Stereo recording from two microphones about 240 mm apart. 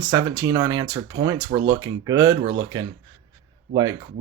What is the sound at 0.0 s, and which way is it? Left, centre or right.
Speech, centre.